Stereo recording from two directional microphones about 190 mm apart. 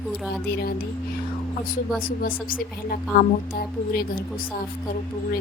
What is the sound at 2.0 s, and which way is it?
A woman's voice, 50° left (ahead or behind).